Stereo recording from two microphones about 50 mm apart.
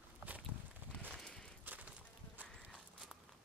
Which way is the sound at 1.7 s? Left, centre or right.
Right.